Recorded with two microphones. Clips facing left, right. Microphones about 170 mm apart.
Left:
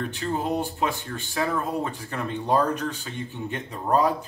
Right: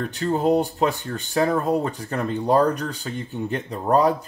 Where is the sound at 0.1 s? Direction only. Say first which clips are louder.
Right 7 dB; 35° right (ahead or behind).